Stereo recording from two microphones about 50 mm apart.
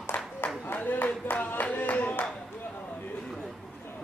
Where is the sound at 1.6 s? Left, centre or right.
Left.